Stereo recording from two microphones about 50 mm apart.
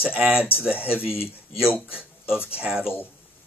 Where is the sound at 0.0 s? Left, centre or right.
Right.